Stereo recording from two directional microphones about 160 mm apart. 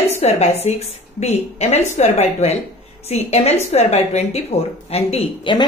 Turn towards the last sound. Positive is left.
turn(degrees=40)  # may be behind; listen again after turning